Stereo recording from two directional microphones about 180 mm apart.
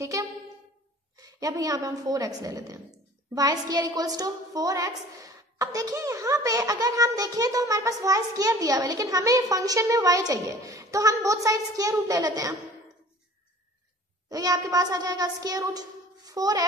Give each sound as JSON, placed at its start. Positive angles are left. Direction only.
{"t": 0.0, "sound": "a woman's voice", "side_deg": -15}
{"t": 14.3, "sound": "a woman's voice", "side_deg": -20}